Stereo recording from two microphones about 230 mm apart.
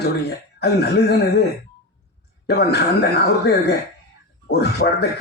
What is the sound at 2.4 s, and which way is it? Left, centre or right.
A man's voice, left.